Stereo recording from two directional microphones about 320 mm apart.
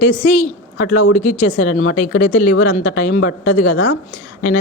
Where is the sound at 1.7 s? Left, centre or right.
Left.